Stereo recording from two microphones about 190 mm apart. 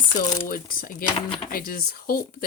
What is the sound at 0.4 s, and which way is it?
Speech, 50° left (ahead or behind).